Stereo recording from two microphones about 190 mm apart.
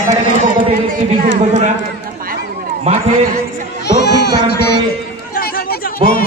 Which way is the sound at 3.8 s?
60° left (ahead or behind).